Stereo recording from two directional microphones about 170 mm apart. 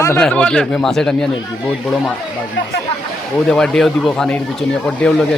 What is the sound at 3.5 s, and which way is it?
Speech, 5° left (ahead or behind).